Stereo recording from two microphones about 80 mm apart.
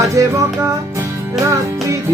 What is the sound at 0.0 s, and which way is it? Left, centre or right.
Music, right.